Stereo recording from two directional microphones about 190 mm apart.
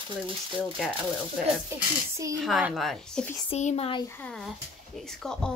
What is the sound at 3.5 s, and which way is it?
Speech, 35° left (ahead or behind).